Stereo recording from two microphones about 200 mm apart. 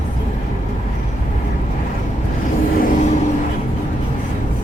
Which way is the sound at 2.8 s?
40° left (ahead or behind).